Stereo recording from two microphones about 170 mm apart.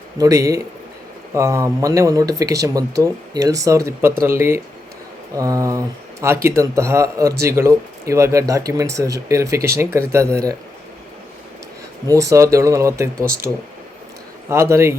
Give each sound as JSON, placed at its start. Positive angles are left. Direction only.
{"t": 0.2, "sound": "a man's voice", "side_deg": -20}
{"t": 12.0, "sound": "a man's voice", "side_deg": -20}